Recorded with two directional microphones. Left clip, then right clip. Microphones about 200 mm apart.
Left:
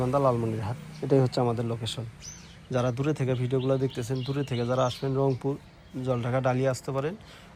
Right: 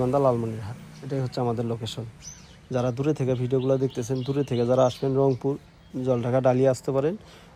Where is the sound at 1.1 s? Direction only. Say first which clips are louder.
Left 3 dB; 5° right (ahead or behind).